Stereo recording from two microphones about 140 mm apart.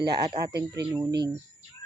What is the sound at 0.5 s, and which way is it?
Speech, 25° right (ahead or behind).